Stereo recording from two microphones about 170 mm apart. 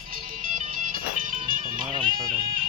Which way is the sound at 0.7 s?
50° right (ahead or behind).